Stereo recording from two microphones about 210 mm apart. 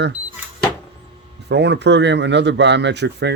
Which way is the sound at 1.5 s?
55° right (ahead or behind).